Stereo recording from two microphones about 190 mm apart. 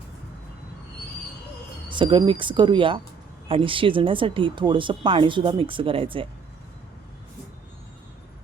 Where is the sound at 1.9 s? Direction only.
25° right (ahead or behind).